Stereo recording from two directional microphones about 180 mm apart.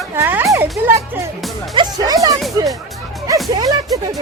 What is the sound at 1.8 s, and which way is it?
Music, 25° right (ahead or behind).